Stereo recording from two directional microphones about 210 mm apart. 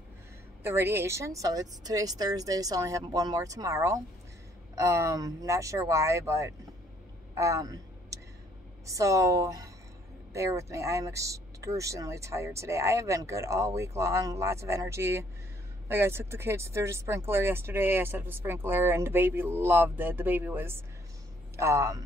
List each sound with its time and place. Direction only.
0.7 s speech: 10° right (ahead or behind)
7.3 s a sound: 15° right (ahead or behind)
8.8 s speech: 15° right (ahead or behind)